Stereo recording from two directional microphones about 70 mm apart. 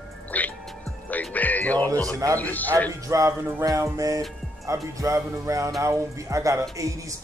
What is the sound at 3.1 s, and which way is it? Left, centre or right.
Speech, right.